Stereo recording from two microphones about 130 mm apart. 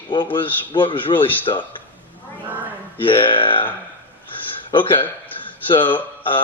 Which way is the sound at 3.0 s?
40° left (ahead or behind).